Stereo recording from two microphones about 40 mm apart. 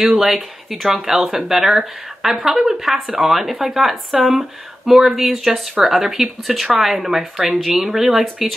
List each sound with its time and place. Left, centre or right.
0.1 s speech: centre
2.5 s speech: right
2.8 s speech: centre